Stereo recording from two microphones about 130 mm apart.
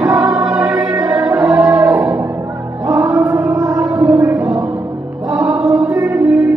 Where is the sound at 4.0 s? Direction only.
25° right (ahead or behind).